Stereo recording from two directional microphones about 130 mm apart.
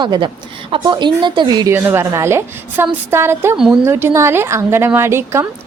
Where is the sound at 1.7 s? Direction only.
15° right (ahead or behind).